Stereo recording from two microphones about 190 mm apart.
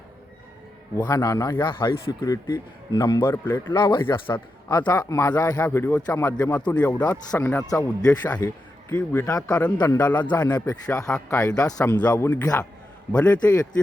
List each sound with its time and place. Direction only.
0.9 s a man's voice: 20° left (ahead or behind)
3.8 s a man's voice: 25° left (ahead or behind); by 10.2 s 10° left (ahead or behind)
10.2 s a man's voice: 20° left (ahead or behind)